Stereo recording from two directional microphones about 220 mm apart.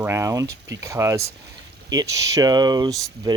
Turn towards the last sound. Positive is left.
turn(degrees=-20)  # may be behind; listen again after turning